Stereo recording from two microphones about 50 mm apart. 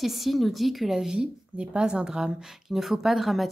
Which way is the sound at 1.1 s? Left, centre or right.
Centre.